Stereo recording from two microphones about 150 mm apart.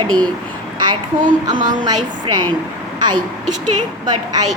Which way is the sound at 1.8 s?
30° right (ahead or behind).